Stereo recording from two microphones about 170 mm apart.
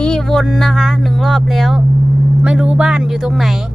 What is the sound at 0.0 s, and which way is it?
Speech, 5° left (ahead or behind).